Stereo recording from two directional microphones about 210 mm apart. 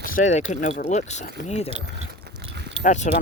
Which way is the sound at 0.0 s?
40° left (ahead or behind).